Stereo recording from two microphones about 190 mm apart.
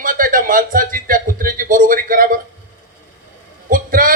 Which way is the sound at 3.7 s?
50° right (ahead or behind).